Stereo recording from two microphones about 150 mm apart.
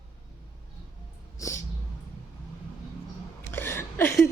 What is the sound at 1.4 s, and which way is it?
Cat, 20° left (ahead or behind).